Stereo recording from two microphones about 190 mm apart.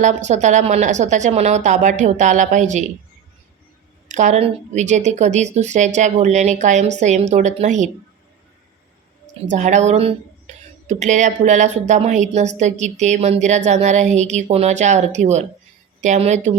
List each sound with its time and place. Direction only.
0.0 s speech: 40° right (ahead or behind)
4.1 s speech: 40° right (ahead or behind)
9.5 s speech: 40° right (ahead or behind)